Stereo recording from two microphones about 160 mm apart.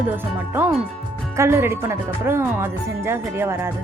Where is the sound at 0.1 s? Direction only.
10° right (ahead or behind).